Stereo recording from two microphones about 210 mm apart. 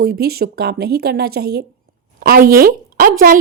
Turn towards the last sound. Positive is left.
turn(degrees=-40)  # may be behind; listen again after turning